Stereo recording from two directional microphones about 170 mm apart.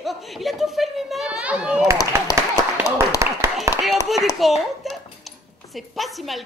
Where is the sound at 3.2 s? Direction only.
15° right (ahead or behind).